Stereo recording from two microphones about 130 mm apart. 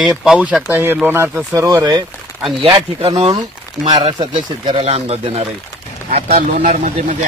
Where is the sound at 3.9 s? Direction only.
35° right (ahead or behind).